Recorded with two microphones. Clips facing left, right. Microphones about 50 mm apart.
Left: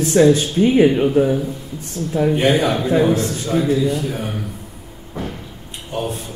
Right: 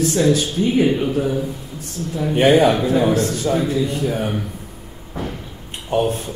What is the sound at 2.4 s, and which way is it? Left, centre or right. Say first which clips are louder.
Speech: right 7 dB; centre.